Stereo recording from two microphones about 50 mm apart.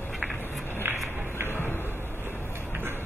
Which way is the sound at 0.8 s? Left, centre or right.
Right.